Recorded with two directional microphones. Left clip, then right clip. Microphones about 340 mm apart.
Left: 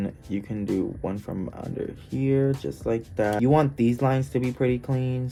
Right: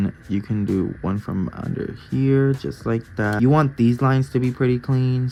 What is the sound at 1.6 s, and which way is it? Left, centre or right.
Speech, centre.